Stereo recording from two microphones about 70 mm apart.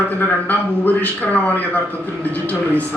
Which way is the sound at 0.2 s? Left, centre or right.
Left.